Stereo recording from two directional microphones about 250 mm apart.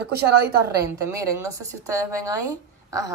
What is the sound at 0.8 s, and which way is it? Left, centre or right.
A woman's voice, centre.